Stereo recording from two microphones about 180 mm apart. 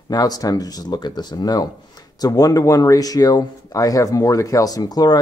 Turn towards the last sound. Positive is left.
turn(degrees=20)  # may be behind; listen again after turning